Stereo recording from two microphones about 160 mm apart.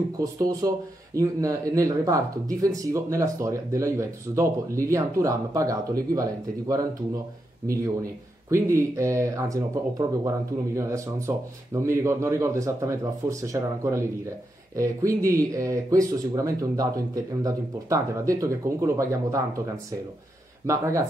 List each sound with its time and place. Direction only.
0.2 s speech: 20° right (ahead or behind)
8.5 s speech: 20° right (ahead or behind)
20.6 s speech: 20° right (ahead or behind)